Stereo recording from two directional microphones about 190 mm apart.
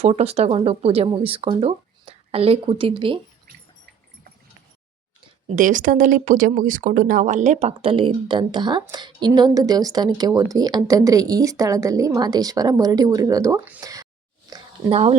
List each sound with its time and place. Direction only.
0.0 s speech: 35° right (ahead or behind)
5.5 s speech: 45° right (ahead or behind); by 14.1 s 15° right (ahead or behind)
14.5 s a sound: 30° right (ahead or behind)